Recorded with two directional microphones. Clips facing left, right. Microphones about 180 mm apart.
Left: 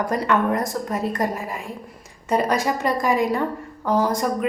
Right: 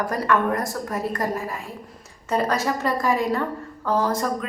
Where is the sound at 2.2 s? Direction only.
15° left (ahead or behind).